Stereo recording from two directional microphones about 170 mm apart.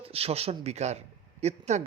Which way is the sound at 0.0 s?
35° right (ahead or behind).